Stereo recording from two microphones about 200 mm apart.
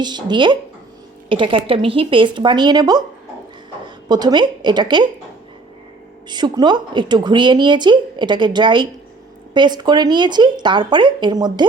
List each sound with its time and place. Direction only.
0.0 s a woman's voice: 20° right (ahead or behind)
6.2 s a woman's voice: 20° right (ahead or behind)